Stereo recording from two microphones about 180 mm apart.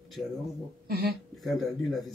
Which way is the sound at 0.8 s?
60° right (ahead or behind).